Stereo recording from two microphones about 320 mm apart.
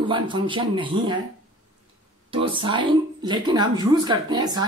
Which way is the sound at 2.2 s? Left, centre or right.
Centre.